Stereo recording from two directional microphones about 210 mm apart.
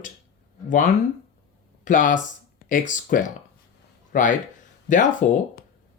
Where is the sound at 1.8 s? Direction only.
40° left (ahead or behind).